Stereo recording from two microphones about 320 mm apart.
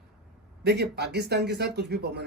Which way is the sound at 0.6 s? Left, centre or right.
Right.